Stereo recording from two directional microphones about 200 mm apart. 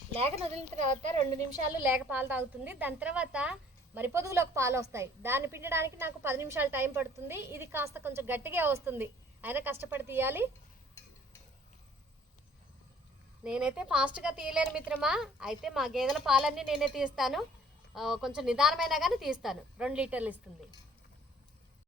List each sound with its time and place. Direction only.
0.5 s a woman's voice: 35° right (ahead or behind)
1.8 s a woman's voice: 10° right (ahead or behind)
13.4 s a woman's voice: 5° right (ahead or behind)